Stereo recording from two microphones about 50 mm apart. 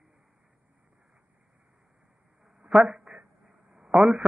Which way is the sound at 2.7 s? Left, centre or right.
Centre.